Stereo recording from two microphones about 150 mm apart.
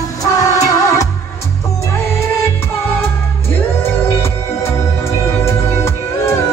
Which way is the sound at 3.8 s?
15° left (ahead or behind).